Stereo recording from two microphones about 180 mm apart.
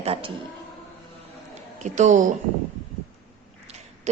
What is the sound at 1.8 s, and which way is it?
Speech, 40° right (ahead or behind).